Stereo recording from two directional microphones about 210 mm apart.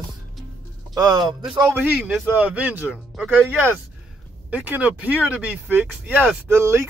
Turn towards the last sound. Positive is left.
turn(degrees=-10)  # may be behind; listen again after turning